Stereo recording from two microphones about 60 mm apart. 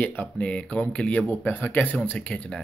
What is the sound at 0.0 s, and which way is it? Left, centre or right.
Speech, left.